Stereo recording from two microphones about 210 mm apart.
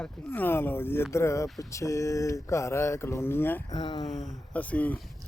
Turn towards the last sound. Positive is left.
turn(degrees=5)  # may be behind; listen again after turning